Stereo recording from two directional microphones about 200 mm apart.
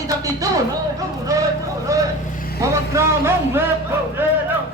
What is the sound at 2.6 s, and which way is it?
Speech, 15° right (ahead or behind).